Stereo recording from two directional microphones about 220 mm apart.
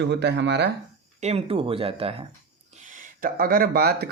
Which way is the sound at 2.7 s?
35° right (ahead or behind).